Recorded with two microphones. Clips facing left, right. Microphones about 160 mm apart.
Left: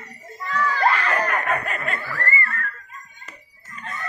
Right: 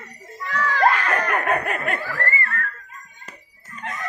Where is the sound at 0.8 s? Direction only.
55° right (ahead or behind).